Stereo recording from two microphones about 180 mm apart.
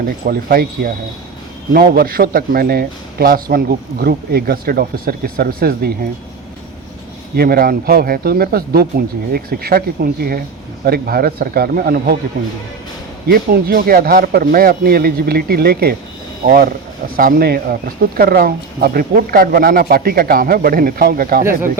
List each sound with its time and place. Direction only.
0.0 s speech: 55° right (ahead or behind)
7.3 s speech: 55° right (ahead or behind)
13.2 s speech: 55° right (ahead or behind)